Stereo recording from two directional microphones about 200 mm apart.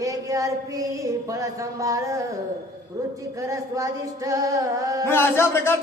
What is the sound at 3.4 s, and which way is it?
Music, 15° right (ahead or behind).